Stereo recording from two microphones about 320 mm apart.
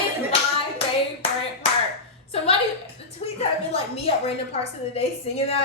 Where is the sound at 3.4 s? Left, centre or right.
Centre.